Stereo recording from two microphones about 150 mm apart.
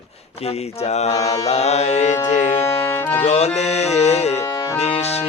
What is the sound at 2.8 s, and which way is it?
Music, 15° left (ahead or behind).